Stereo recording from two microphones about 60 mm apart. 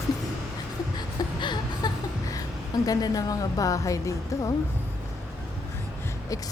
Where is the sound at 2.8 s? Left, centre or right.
Left.